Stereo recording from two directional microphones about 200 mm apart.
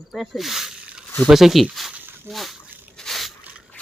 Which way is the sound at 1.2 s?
Centre (ahead or behind).